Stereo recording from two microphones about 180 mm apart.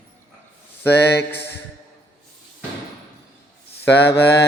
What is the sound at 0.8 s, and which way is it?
Mantra, 65° left (ahead or behind).